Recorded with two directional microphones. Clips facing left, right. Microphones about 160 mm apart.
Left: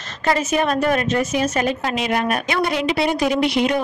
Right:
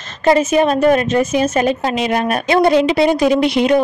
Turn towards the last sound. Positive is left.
turn(degrees=-25)  # may be behind; listen again after turning